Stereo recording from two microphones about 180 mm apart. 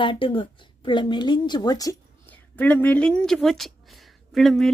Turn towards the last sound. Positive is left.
turn(degrees=0)  # may be behind; listen again after turning